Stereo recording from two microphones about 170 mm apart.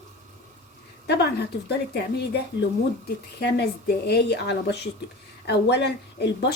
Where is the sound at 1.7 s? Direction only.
70° left (ahead or behind).